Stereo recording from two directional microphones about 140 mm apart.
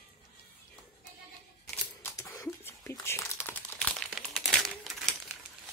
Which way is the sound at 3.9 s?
Centre (ahead or behind).